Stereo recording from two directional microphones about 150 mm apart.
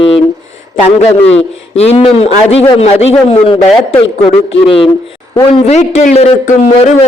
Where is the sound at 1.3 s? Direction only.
45° left (ahead or behind).